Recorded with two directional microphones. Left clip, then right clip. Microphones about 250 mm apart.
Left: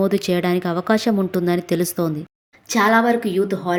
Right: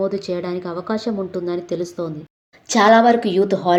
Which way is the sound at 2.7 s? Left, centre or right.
Left.